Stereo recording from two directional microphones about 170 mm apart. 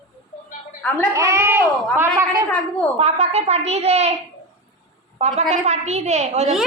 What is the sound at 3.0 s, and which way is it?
A woman's voice, 40° right (ahead or behind).